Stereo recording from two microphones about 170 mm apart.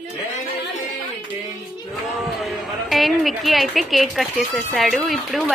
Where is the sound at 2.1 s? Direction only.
Centre (ahead or behind).